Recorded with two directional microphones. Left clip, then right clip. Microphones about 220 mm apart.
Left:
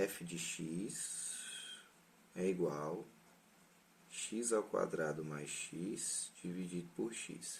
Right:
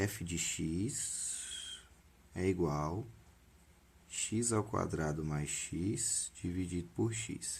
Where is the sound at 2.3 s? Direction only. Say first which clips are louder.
Right 3 dB; 50° right (ahead or behind).